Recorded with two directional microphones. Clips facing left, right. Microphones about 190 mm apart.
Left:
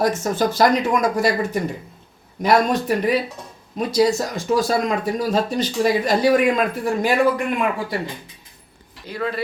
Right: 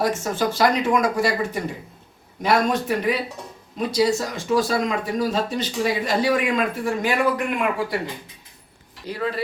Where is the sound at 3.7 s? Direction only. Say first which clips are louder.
Left 2 dB; 40° left (ahead or behind).